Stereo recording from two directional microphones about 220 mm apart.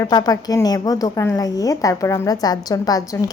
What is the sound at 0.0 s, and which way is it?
A woman's voice, 15° left (ahead or behind).